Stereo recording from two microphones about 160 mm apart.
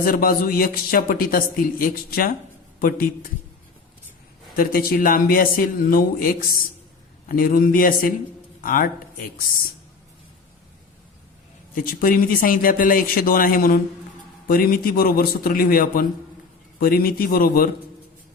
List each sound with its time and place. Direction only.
0.0 s a man's voice: 65° left (ahead or behind)
4.5 s a man's voice: 65° left (ahead or behind)
11.7 s a man's voice: 60° left (ahead or behind)